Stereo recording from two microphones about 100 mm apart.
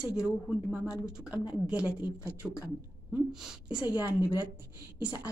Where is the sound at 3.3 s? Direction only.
10° right (ahead or behind).